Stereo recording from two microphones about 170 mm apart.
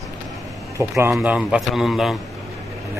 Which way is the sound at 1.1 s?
5° right (ahead or behind).